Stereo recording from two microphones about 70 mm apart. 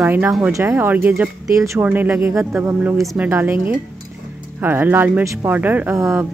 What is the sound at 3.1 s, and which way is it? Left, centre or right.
Speech, right.